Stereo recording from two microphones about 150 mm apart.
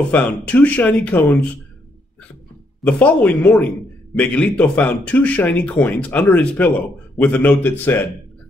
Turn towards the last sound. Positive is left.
turn(degrees=15)  # may be behind; listen again after turning